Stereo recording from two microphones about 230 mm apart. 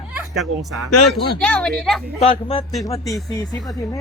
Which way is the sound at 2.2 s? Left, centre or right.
Left.